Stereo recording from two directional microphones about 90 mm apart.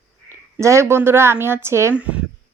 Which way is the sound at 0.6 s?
30° right (ahead or behind).